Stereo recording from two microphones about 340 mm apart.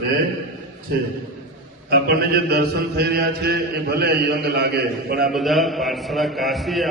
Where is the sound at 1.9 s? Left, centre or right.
Right.